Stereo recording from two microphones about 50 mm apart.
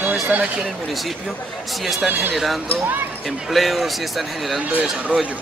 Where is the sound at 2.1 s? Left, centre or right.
Right.